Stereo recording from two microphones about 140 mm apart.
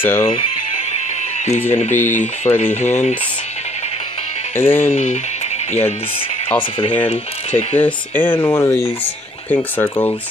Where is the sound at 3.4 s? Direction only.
50° left (ahead or behind).